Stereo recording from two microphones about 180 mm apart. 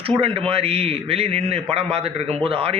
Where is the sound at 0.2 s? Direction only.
30° right (ahead or behind).